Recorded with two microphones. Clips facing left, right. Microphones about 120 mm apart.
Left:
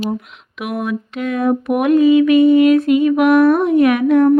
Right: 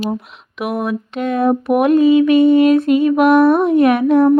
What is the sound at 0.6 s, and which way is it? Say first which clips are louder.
Mantra: right 2 dB; 30° right (ahead or behind).